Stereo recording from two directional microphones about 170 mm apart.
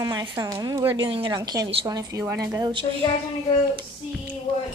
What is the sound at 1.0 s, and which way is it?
A woman's voice, 30° right (ahead or behind).